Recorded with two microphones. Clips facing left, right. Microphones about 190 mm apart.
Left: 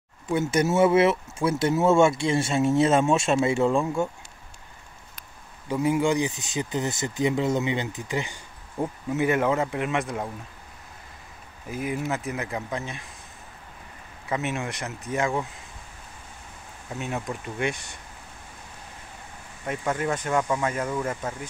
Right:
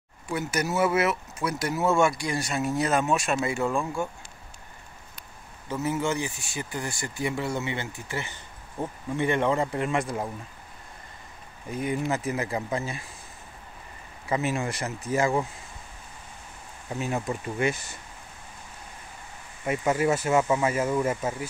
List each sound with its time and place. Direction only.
0.3 s speech: 25° left (ahead or behind)
5.7 s speech: 15° left (ahead or behind)
11.7 s speech: 5° left (ahead or behind)
14.3 s speech: centre (ahead or behind)
16.9 s speech: centre (ahead or behind)
19.6 s speech: 10° right (ahead or behind)